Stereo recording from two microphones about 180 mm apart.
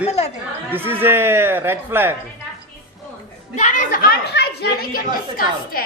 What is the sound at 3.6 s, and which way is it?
Speech, 40° left (ahead or behind).